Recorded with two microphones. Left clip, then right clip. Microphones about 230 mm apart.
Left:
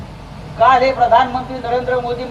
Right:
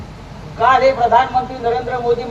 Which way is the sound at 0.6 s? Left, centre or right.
Left.